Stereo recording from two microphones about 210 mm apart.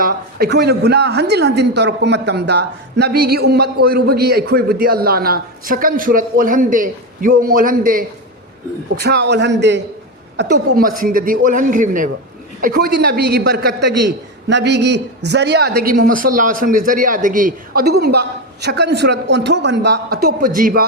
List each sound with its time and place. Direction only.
0.0 s a woman's voice: 45° right (ahead or behind)